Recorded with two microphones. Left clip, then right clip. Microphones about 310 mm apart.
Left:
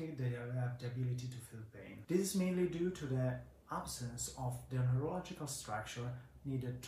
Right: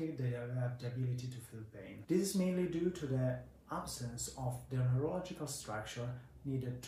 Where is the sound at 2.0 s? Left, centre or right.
Centre.